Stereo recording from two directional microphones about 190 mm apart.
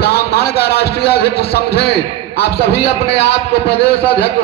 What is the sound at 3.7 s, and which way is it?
Speech, 30° left (ahead or behind).